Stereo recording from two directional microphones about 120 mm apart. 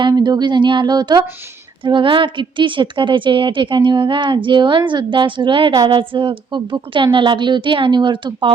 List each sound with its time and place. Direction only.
0.0 s a woman's voice: 35° right (ahead or behind)